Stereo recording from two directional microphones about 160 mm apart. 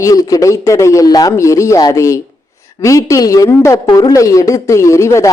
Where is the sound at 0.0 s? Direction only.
20° left (ahead or behind).